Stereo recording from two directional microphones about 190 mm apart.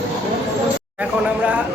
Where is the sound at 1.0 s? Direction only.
5° right (ahead or behind).